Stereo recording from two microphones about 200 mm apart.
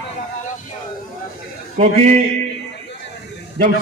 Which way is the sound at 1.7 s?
35° right (ahead or behind).